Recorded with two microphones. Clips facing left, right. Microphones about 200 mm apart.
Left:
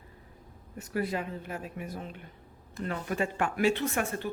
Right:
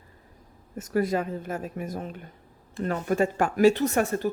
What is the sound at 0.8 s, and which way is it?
A woman's voice, 45° right (ahead or behind).